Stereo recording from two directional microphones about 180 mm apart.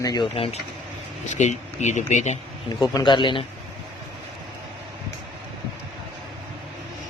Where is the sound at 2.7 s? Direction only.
20° left (ahead or behind).